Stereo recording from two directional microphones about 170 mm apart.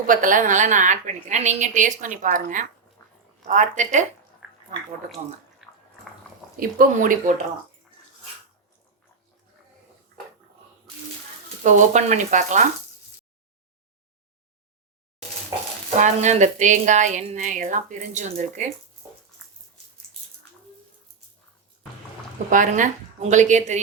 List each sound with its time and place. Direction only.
0.1 s a woman's voice: 50° right (ahead or behind)
4.4 s a sound: 5° right (ahead or behind)
5.6 s biting: centre (ahead or behind)
6.6 s speech: 55° right (ahead or behind)
11.6 s a woman's voice: 45° right (ahead or behind)
16.0 s a woman's voice: 45° right (ahead or behind)
22.4 s a woman's voice: 50° right (ahead or behind)